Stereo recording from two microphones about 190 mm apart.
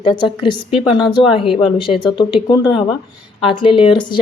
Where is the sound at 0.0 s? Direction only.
25° left (ahead or behind).